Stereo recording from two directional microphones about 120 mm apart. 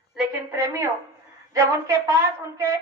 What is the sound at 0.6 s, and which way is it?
A woman's voice, 20° right (ahead or behind).